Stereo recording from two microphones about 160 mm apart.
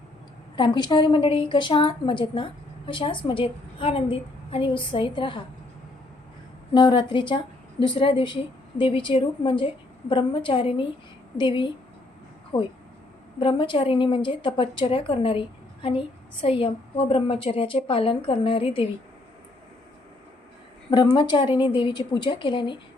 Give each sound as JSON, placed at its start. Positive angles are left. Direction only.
{"t": 0.5, "sound": "a woman's voice", "side_deg": 30}
{"t": 6.7, "sound": "a woman's voice", "side_deg": 30}
{"t": 20.9, "sound": "a woman's voice", "side_deg": 25}